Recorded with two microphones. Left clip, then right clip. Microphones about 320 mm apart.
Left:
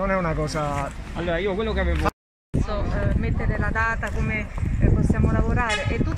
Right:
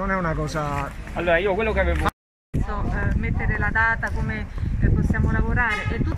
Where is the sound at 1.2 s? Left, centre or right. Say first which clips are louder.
Right 4 dB; right.